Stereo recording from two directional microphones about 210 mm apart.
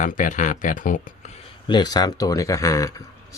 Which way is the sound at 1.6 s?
20° left (ahead or behind).